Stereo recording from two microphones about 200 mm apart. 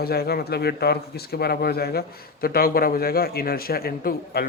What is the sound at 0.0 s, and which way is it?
Speech, 50° left (ahead or behind).